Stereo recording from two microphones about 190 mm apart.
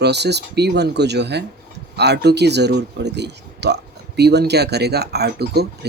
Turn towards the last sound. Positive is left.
turn(degrees=-55)  # may be behind; listen again after turning